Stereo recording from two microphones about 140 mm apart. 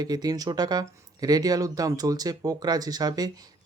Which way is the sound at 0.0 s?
30° right (ahead or behind).